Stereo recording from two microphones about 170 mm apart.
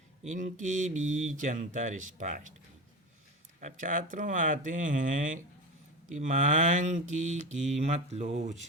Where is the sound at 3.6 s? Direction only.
50° right (ahead or behind).